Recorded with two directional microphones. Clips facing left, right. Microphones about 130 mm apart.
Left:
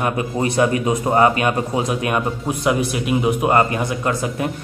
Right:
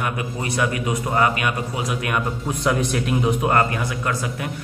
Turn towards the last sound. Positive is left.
turn(degrees=30)  # may be behind; listen again after turning